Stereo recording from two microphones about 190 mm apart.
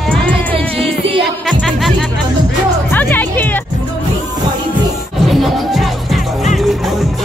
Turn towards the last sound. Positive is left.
turn(degrees=0)  # may be behind; listen again after turning